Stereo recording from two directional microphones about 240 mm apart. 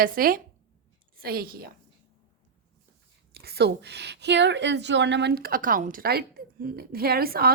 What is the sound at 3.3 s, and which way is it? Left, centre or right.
A woman's voice, right.